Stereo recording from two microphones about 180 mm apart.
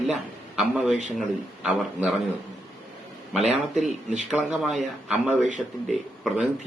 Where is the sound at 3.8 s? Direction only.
40° right (ahead or behind).